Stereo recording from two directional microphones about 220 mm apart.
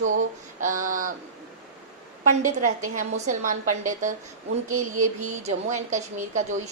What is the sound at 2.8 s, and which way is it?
A woman's voice, 35° right (ahead or behind).